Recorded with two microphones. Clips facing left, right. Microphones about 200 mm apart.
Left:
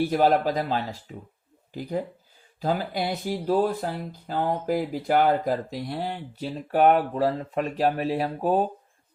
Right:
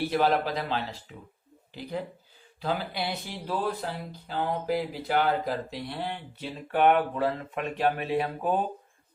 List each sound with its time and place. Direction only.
0.1 s speech: 45° left (ahead or behind)